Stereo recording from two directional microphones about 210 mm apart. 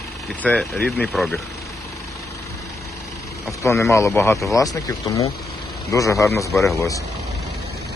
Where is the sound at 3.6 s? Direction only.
15° left (ahead or behind).